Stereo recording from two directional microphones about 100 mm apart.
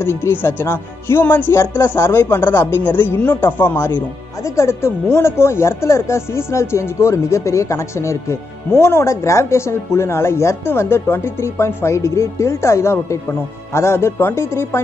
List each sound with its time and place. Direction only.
0.0 s speech: 25° left (ahead or behind)